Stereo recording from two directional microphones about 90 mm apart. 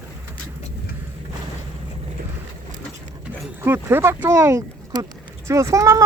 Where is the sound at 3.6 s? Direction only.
25° right (ahead or behind).